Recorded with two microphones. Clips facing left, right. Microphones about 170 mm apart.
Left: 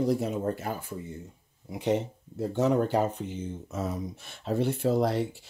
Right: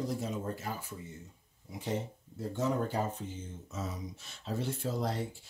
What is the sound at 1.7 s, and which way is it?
Speech, 70° left (ahead or behind).